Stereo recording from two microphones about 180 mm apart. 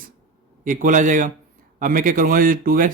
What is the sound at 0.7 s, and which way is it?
Speech, 45° right (ahead or behind).